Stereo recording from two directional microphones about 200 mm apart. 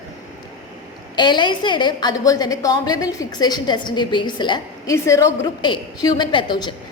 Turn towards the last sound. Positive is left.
turn(degrees=25)  # may be behind; listen again after turning